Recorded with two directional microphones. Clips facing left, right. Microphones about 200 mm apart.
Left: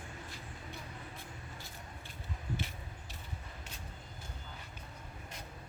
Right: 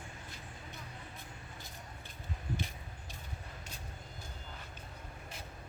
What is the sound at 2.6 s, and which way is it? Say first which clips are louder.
Vehicle: even; 15° right (ahead or behind).